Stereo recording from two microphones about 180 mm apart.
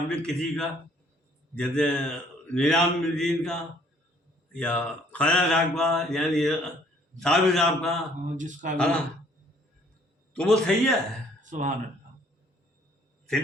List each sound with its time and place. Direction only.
0.1 s speech: 5° left (ahead or behind)
8.4 s speech: 45° right (ahead or behind)
8.8 s speech: 5° left (ahead or behind)
10.3 s speech: 5° left (ahead or behind)
11.3 s a sound: 45° right (ahead or behind)